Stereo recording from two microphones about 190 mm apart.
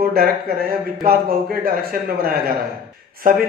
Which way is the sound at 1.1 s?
55° right (ahead or behind).